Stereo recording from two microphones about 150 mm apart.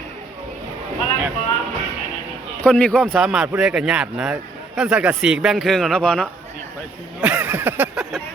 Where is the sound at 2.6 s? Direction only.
10° left (ahead or behind).